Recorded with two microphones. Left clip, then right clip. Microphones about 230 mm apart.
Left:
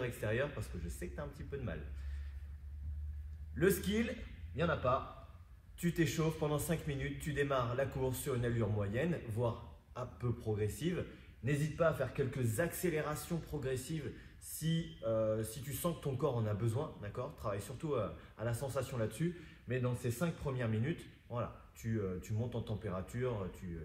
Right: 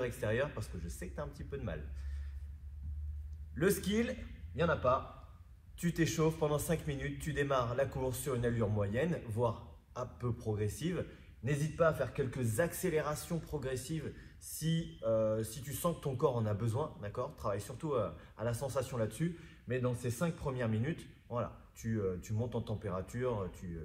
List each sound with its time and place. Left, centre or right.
0.0 s speech: centre
3.5 s speech: centre